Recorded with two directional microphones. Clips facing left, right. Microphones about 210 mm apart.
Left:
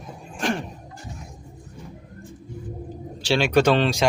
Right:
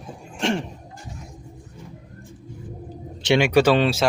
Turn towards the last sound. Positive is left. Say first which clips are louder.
# right 1 dB
turn(degrees=-5)  # may be behind; listen again after turning